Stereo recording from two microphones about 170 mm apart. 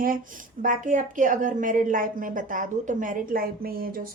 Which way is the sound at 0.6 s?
50° right (ahead or behind).